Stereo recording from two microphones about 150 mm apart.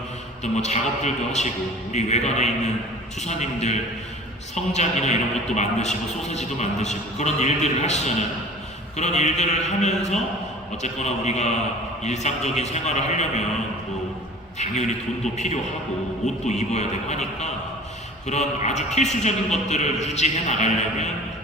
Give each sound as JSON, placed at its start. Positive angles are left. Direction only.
{"t": 0.4, "sound": "a man's voice", "side_deg": 50}
{"t": 14.6, "sound": "a man's voice", "side_deg": 50}